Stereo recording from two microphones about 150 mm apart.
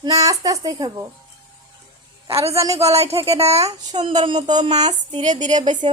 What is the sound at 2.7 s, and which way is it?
A woman's voice, 45° right (ahead or behind).